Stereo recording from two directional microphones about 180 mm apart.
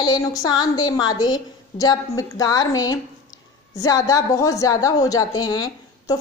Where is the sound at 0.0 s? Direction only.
20° left (ahead or behind).